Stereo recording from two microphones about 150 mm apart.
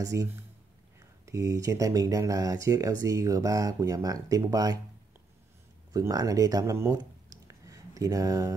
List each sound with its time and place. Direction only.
0.0 s speech: 20° right (ahead or behind)
5.9 s speech: 25° right (ahead or behind)